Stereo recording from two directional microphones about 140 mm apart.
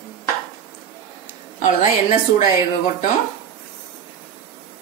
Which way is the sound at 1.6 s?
55° left (ahead or behind).